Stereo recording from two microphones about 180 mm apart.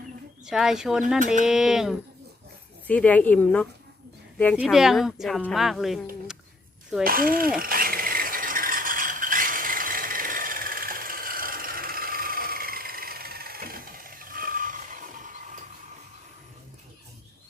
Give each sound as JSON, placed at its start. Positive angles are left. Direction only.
{"t": 0.5, "sound": "speech", "side_deg": 0}
{"t": 2.8, "sound": "speech", "side_deg": 10}
{"t": 4.5, "sound": "speech", "side_deg": -5}
{"t": 7.0, "sound": "speech", "side_deg": -50}
{"t": 7.6, "sound": "a sound", "side_deg": -55}